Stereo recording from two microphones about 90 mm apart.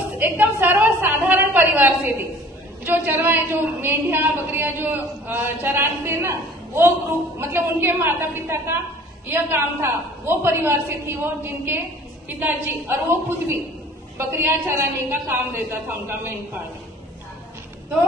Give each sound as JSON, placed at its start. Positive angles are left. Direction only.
{"t": 0.2, "sound": "a woman's voice", "side_deg": -20}
{"t": 7.3, "sound": "a woman's voice", "side_deg": -25}